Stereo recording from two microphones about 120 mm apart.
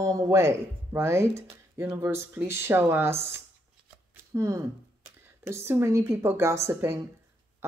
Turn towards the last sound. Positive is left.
turn(degrees=-25)  # may be behind; listen again after turning